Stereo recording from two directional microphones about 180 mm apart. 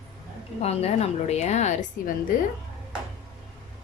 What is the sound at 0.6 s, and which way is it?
A woman's voice, 35° left (ahead or behind).